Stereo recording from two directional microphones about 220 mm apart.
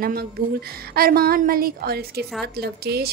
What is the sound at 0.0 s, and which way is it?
A woman's voice, 45° right (ahead or behind).